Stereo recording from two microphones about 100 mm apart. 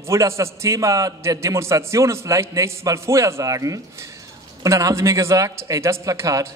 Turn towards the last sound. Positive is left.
turn(degrees=-35)  # may be behind; listen again after turning